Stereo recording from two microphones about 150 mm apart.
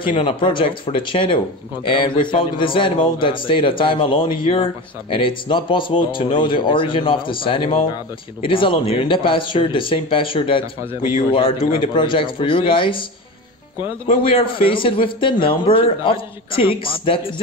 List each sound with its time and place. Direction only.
0.1 s a man's voice: 35° left (ahead or behind)
14.0 s a man's voice: 40° left (ahead or behind)